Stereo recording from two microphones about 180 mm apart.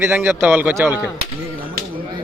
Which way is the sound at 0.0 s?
10° right (ahead or behind).